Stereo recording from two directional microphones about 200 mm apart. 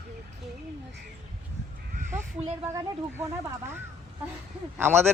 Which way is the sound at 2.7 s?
15° right (ahead or behind).